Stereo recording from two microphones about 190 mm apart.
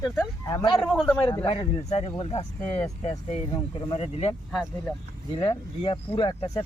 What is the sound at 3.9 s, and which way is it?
Speech, 30° left (ahead or behind).